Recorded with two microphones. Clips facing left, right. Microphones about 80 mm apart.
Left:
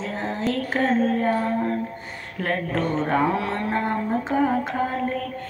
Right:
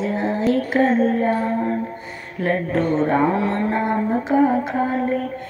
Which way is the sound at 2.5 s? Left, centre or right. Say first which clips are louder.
Right 5 dB; right.